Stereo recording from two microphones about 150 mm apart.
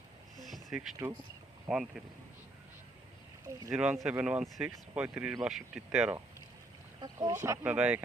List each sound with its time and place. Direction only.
0.4 s a sound: centre (ahead or behind)
1.7 s speech: 5° right (ahead or behind)
3.7 s speech: 5° right (ahead or behind)
7.0 s speech: 25° right (ahead or behind)
7.7 s speech: 10° right (ahead or behind)